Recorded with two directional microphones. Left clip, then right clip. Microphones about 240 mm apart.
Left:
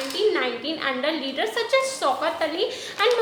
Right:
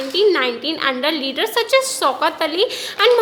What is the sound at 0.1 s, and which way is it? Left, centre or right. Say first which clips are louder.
A woman's voice: right 7 dB; right.